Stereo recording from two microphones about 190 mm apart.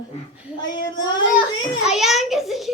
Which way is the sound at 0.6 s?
20° left (ahead or behind).